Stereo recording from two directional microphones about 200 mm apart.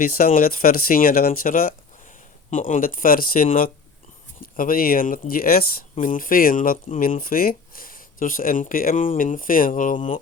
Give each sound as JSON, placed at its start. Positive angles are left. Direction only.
{"t": 0.0, "sound": "speech", "side_deg": 45}